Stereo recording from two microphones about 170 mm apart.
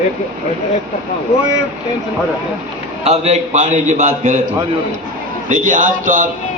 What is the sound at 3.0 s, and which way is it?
A man's voice, 40° right (ahead or behind).